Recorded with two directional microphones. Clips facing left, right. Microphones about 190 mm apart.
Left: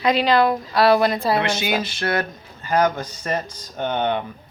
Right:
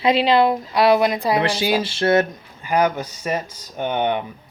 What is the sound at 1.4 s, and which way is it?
Speech, 30° right (ahead or behind).